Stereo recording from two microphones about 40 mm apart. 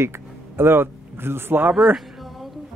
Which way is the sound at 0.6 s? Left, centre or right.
Right.